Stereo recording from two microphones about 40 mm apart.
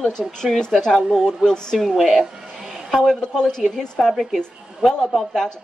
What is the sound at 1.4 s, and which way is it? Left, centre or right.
Speech, centre.